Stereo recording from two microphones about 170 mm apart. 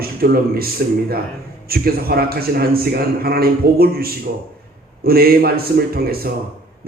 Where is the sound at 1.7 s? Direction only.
65° right (ahead or behind).